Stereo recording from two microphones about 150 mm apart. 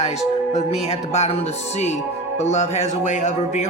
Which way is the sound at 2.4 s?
50° left (ahead or behind).